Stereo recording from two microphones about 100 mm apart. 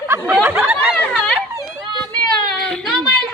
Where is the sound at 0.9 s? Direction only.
10° left (ahead or behind).